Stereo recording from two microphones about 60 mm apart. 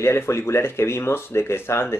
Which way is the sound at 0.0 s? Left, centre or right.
Left.